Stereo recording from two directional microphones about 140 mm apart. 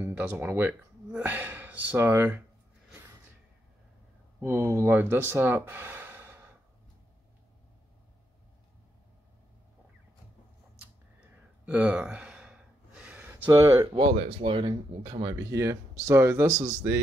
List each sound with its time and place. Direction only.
0.0 s speech: 15° right (ahead or behind)
4.4 s speech: 15° right (ahead or behind)
11.6 s gasp: 10° right (ahead or behind)
13.9 s speech: 40° right (ahead or behind); by 16.9 s 20° right (ahead or behind)